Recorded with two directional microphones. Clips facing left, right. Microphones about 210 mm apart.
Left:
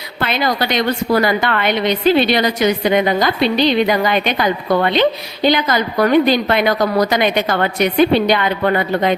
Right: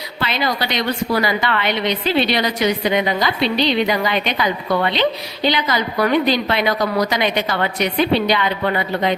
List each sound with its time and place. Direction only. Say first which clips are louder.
0.2 s a woman's voice: left 3 dB; 50° left (ahead or behind)